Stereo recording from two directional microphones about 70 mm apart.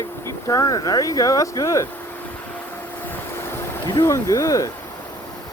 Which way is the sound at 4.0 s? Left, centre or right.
Left.